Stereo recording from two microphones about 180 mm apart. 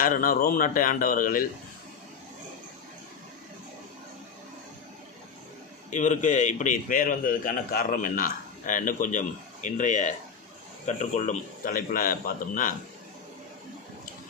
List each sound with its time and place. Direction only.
0.0 s a man's voice: 50° left (ahead or behind)
5.9 s a man's voice: 40° left (ahead or behind)